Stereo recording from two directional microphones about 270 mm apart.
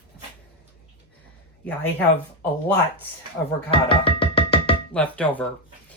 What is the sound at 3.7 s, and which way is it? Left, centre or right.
Music, centre.